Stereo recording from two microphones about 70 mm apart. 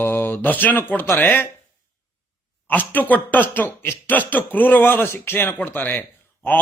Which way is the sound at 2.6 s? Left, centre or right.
Left.